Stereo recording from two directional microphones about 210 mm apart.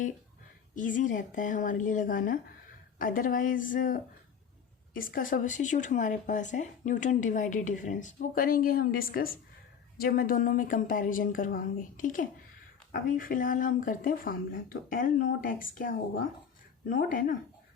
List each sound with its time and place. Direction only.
0.8 s speech: 40° left (ahead or behind)